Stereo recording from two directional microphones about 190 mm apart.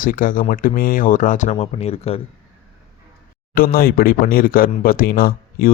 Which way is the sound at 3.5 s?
50° left (ahead or behind).